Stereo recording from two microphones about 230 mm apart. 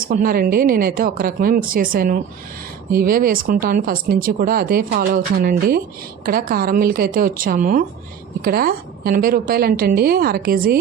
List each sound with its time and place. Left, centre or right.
0.0 s speech: right